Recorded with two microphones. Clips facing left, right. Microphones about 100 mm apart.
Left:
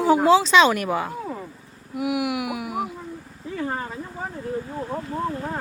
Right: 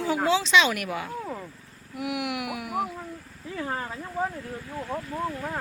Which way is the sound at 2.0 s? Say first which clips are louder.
Left 6 dB; 5° left (ahead or behind).